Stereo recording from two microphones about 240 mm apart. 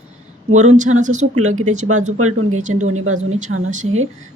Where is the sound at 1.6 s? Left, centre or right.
Right.